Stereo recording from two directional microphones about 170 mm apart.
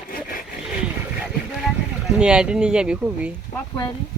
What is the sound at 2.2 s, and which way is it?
Speech, 5° right (ahead or behind).